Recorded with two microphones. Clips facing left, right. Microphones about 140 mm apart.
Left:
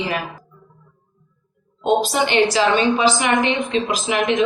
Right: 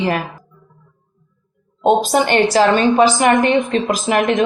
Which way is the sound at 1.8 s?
50° right (ahead or behind).